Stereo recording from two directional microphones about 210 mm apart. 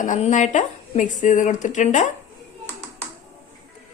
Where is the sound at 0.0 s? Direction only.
35° left (ahead or behind).